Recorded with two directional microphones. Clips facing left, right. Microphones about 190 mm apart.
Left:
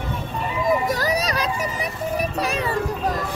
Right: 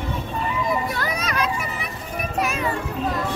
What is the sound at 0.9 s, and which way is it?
Children playing, 35° left (ahead or behind).